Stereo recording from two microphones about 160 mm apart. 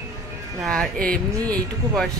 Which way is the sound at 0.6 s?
5° left (ahead or behind).